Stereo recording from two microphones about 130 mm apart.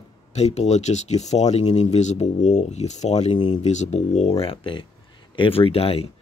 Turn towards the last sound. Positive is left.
turn(degrees=50)  # may be behind; listen again after turning